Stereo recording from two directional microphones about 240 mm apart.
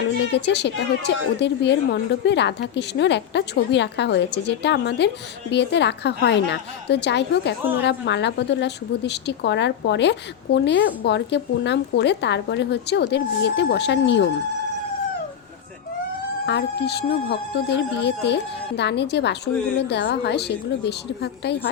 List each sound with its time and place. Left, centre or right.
0.3 s a woman's voice: left
16.5 s a woman's voice: left